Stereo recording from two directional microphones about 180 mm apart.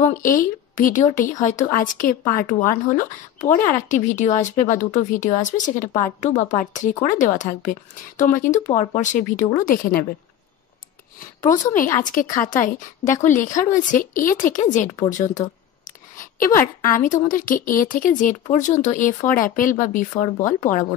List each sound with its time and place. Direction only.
0.0 s speech: 50° left (ahead or behind)
11.7 s speech: 50° left (ahead or behind)